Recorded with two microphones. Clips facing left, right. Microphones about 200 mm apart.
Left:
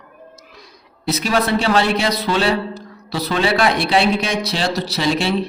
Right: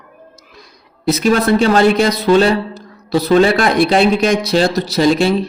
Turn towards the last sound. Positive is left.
turn(degrees=-45)  # may be behind; listen again after turning